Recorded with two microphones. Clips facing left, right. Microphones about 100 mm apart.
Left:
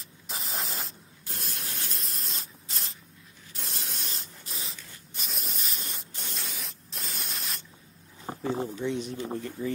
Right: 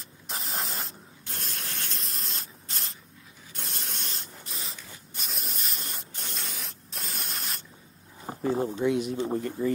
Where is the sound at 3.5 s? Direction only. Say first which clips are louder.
Right 1 dB; centre (ahead or behind).